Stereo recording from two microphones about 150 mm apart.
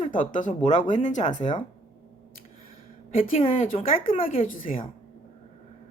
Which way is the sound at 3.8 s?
40° left (ahead or behind).